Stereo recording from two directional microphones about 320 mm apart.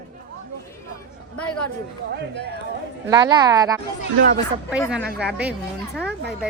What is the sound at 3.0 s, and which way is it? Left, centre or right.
Speech, centre.